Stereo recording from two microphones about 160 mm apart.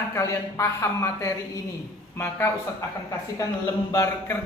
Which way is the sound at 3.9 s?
20° left (ahead or behind).